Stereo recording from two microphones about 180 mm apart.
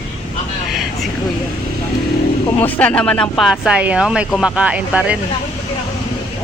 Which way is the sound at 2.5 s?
10° left (ahead or behind).